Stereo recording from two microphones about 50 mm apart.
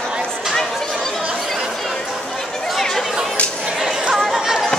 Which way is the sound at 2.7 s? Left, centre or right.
Centre.